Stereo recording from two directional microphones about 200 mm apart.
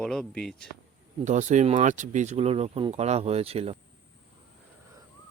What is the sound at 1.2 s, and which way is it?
Speech, 35° right (ahead or behind).